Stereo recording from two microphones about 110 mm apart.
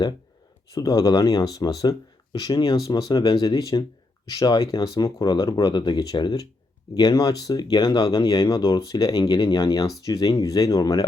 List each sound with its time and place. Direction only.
0.7 s speech: 35° left (ahead or behind)